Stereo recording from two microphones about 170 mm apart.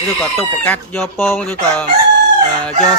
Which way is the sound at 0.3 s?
10° left (ahead or behind).